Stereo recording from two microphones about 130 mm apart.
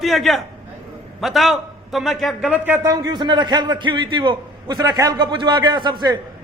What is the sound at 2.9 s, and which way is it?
A man's voice, 30° right (ahead or behind).